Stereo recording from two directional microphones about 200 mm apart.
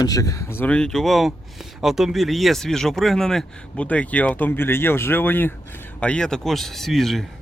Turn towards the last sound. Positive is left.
turn(degrees=0)  # may be behind; listen again after turning